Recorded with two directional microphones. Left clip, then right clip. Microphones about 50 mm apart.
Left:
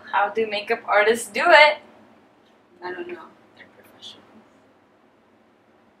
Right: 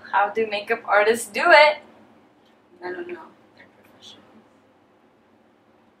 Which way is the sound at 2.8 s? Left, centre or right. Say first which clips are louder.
Even; centre.